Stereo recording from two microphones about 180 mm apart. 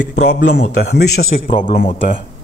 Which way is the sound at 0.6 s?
60° left (ahead or behind).